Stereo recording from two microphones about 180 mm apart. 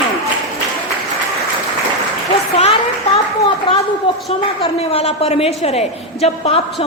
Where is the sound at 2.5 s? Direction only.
35° left (ahead or behind).